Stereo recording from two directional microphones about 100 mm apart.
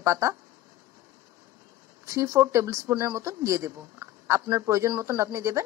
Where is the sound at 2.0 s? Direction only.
30° right (ahead or behind).